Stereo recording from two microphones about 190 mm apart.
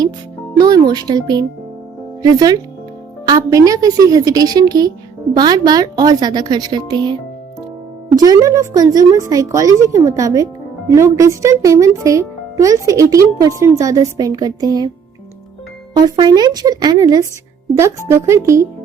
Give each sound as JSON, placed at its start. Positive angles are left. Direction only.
{"t": 0.6, "sound": "a woman's voice", "side_deg": -20}
{"t": 16.0, "sound": "a woman's voice", "side_deg": -20}